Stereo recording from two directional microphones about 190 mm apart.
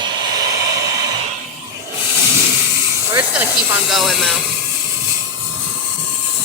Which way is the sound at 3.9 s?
Centre (ahead or behind).